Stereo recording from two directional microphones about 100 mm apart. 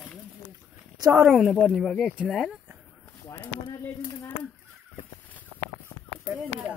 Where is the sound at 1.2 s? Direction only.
5° right (ahead or behind).